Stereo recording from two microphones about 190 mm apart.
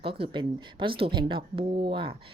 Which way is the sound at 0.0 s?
30° right (ahead or behind).